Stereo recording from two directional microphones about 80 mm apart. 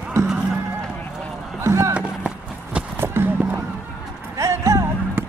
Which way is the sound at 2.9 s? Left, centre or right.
Right.